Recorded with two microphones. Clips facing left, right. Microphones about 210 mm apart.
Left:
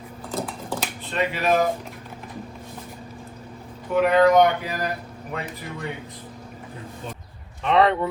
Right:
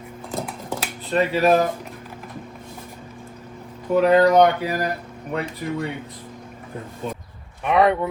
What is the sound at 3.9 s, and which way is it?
Speech, 35° right (ahead or behind).